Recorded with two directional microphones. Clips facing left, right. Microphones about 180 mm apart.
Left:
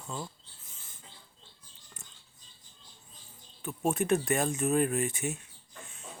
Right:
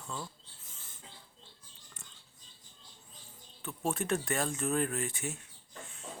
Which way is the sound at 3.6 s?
15° left (ahead or behind).